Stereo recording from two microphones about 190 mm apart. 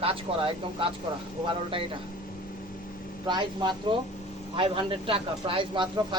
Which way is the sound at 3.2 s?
25° right (ahead or behind).